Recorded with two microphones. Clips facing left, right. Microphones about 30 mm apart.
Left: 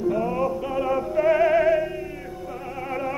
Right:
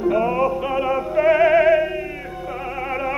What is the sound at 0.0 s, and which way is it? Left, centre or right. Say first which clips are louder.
Music: right 5 dB; right.